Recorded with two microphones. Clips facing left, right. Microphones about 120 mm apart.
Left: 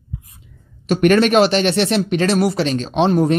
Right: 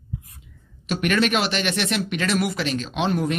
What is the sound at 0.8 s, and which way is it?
Speech, 40° left (ahead or behind).